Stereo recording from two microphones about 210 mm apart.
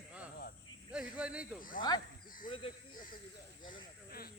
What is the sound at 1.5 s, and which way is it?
Speech, 40° left (ahead or behind).